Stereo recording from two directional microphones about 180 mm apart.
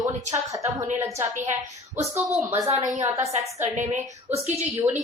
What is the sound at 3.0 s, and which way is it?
Speech, 15° right (ahead or behind).